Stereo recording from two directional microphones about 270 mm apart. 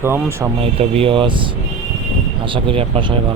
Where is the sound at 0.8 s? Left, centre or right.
Right.